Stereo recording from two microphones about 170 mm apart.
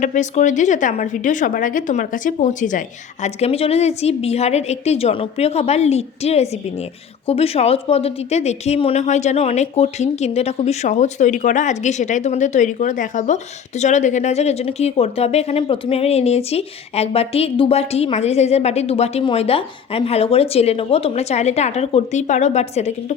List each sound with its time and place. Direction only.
0.0 s speech: 45° left (ahead or behind)